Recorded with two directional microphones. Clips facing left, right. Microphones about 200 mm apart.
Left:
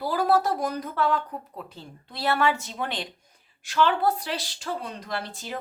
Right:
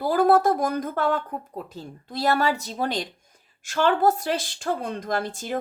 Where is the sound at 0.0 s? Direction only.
50° right (ahead or behind).